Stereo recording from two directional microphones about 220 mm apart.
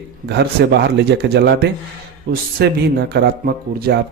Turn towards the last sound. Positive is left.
turn(degrees=-45)  # may be behind; listen again after turning